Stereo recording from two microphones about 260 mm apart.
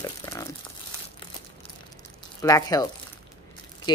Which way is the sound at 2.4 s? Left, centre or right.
Centre.